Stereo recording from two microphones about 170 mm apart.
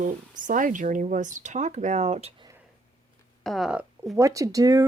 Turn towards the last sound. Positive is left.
turn(degrees=-20)  # may be behind; listen again after turning